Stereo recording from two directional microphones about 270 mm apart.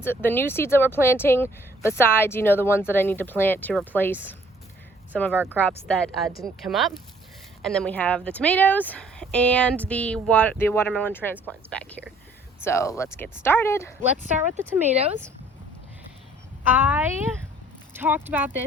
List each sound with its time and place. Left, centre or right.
0.0 s speech: centre
5.3 s speech: centre
5.5 s speech: centre
14.8 s speech: right
16.7 s speech: centre